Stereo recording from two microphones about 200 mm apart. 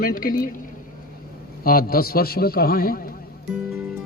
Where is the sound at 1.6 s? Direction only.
50° left (ahead or behind).